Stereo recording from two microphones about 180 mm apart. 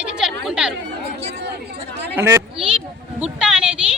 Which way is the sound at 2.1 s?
15° right (ahead or behind).